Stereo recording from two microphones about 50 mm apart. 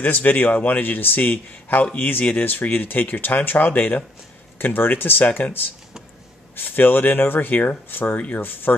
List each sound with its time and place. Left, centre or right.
0.0 s speech: left